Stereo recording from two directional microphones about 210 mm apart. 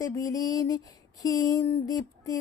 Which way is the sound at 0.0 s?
15° left (ahead or behind).